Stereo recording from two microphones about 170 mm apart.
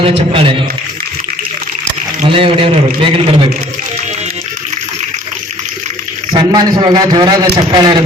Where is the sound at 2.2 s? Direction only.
30° right (ahead or behind).